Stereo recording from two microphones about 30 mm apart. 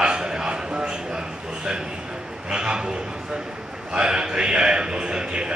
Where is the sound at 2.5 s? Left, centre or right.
Right.